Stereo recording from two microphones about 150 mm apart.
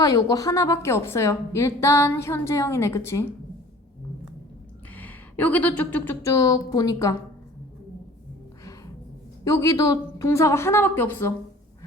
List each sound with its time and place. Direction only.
0.0 s a woman's voice: 25° left (ahead or behind)
4.9 s speech: 10° left (ahead or behind)
6.2 s a woman's voice: 25° left (ahead or behind)
9.4 s a woman's voice: 20° left (ahead or behind)